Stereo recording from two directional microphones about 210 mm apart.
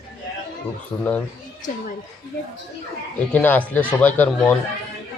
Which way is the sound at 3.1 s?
5° left (ahead or behind).